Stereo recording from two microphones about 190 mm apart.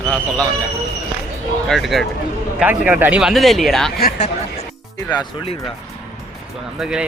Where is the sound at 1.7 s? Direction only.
Centre (ahead or behind).